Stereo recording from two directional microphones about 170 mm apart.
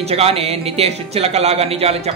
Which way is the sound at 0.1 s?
35° right (ahead or behind).